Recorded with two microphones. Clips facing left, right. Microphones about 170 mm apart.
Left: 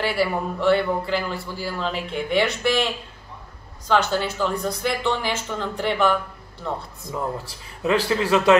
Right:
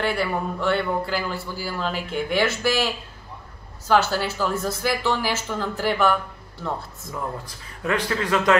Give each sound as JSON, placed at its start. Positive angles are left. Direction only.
{"t": 0.0, "sound": "a man's voice", "side_deg": 0}
{"t": 7.1, "sound": "speech", "side_deg": 20}